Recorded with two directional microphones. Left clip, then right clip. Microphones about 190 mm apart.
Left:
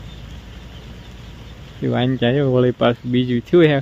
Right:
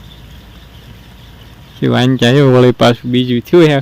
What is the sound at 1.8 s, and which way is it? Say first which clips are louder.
Speech: right 7 dB; 30° right (ahead or behind).